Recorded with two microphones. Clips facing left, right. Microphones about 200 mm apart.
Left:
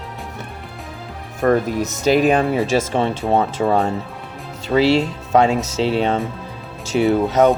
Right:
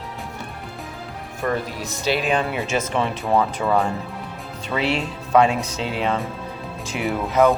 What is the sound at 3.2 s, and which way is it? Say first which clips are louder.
Speech: left 2 dB; 30° left (ahead or behind).